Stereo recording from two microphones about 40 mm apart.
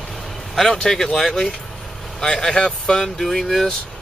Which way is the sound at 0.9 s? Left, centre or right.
Centre.